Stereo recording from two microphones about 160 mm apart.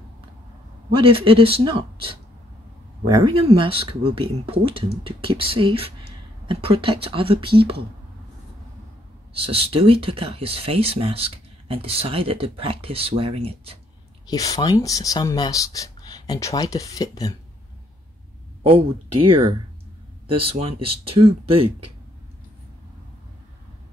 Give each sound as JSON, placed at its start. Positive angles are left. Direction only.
{"t": 0.9, "sound": "speech", "side_deg": -35}
{"t": 9.3, "sound": "speech", "side_deg": -35}
{"t": 14.2, "sound": "speech", "side_deg": 20}
{"t": 18.6, "sound": "speech", "side_deg": -35}